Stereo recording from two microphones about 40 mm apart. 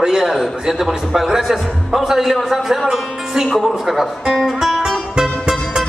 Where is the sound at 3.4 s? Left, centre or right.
Centre.